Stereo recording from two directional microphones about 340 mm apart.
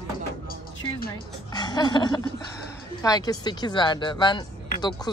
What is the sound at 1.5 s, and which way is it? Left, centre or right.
Speech, centre.